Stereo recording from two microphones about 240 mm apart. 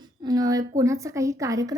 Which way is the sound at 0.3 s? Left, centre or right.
Centre.